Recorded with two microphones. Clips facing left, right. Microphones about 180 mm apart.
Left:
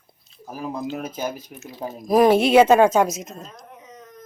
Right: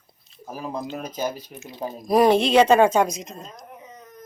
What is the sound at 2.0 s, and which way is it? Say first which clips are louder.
A woman's voice: left 2 dB; centre (ahead or behind).